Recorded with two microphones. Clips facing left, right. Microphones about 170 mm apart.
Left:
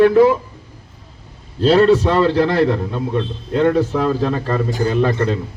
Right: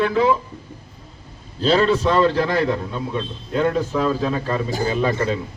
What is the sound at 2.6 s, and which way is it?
A man's voice, 65° left (ahead or behind).